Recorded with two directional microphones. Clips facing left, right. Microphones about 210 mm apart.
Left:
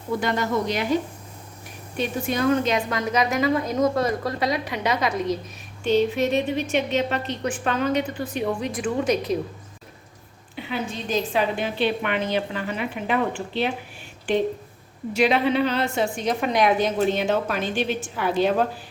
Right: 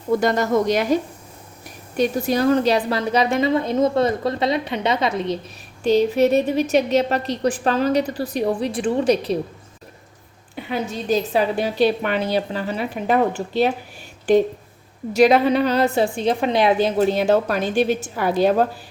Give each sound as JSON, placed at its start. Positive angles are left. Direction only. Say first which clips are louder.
{"t": 0.2, "sound": "speech", "louder": "right 5 dB", "side_deg": -40}
{"t": 2.0, "sound": "a woman's voice", "louder": "right 5 dB", "side_deg": -35}
{"t": 10.5, "sound": "speech", "louder": "right 4 dB", "side_deg": -40}